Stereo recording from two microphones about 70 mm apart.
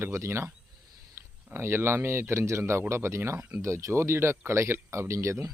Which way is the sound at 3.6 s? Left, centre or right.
Right.